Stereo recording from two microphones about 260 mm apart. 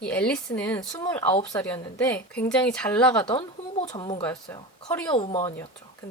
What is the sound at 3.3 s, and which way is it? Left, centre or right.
Speech, centre.